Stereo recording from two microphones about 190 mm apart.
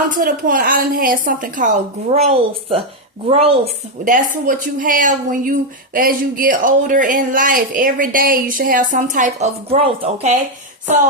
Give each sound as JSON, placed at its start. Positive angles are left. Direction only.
{"t": 0.1, "sound": "speech", "side_deg": -50}
{"t": 2.0, "sound": "speech", "side_deg": -30}
{"t": 4.0, "sound": "speech", "side_deg": -45}